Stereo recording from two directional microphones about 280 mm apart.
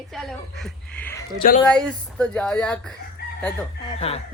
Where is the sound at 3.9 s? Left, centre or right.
Left.